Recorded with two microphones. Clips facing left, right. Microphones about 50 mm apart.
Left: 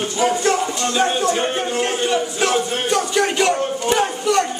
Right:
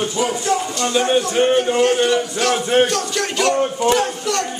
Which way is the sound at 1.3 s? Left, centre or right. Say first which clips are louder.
Right 5 dB; right.